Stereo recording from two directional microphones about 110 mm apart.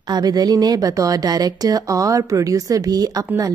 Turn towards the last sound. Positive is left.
turn(degrees=-35)  # may be behind; listen again after turning